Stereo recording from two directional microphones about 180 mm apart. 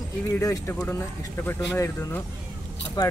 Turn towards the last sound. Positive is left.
turn(degrees=20)  # may be behind; listen again after turning